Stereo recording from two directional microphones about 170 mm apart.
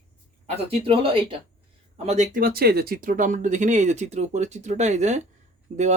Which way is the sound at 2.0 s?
45° right (ahead or behind).